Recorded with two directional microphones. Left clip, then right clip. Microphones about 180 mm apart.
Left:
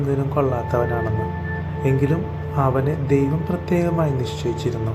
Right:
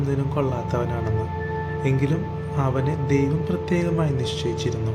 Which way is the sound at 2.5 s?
20° right (ahead or behind).